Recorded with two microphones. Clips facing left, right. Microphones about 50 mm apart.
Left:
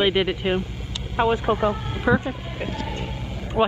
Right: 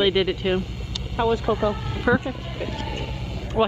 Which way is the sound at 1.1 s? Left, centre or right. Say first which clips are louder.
Left 1 dB; left.